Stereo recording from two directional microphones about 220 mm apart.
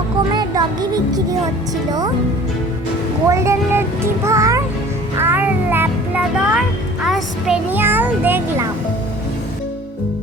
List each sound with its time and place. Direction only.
0.3 s a child's voice: 15° right (ahead or behind)
3.2 s a child's voice: 10° right (ahead or behind)
5.1 s music: 10° right (ahead or behind)